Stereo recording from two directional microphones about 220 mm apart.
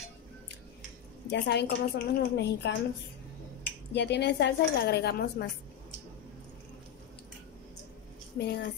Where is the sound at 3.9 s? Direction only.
50° left (ahead or behind).